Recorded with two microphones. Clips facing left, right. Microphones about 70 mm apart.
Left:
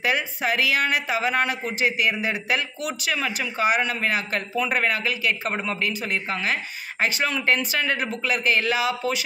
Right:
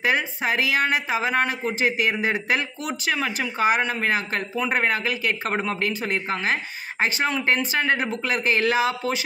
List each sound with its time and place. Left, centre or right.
0.0 s a man's voice: right
7.0 s a man's voice: right